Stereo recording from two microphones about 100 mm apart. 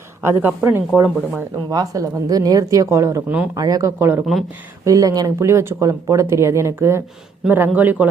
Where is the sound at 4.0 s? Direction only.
20° right (ahead or behind).